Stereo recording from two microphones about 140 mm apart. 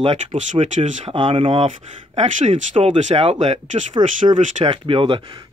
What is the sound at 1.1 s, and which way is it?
Speech, 40° right (ahead or behind).